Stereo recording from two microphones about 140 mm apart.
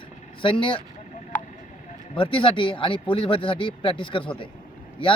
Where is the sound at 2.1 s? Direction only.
35° left (ahead or behind).